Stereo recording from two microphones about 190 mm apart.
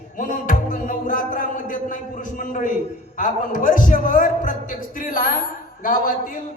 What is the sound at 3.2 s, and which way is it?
A man's voice, 45° left (ahead or behind).